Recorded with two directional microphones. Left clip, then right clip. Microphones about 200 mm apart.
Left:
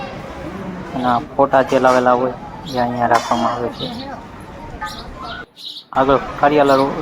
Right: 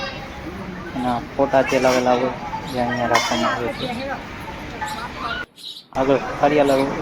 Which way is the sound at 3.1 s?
20° left (ahead or behind).